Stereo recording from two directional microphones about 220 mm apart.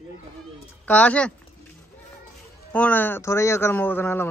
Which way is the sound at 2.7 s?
5° left (ahead or behind).